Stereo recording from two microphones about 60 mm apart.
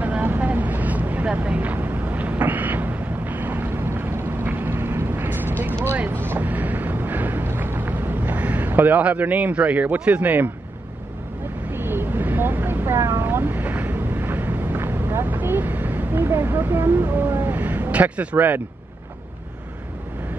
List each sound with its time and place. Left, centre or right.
0.0 s vehicle: right
5.9 s boat: right
8.6 s speech: right
11.7 s vehicle: right
12.8 s vehicle: right